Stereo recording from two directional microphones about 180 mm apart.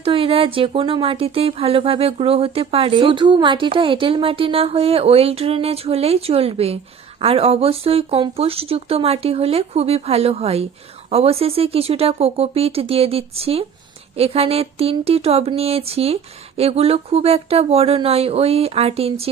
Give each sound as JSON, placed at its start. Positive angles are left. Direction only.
{"t": 0.0, "sound": "speech", "side_deg": -30}